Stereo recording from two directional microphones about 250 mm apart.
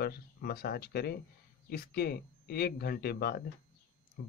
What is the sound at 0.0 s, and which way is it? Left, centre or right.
Speech, left.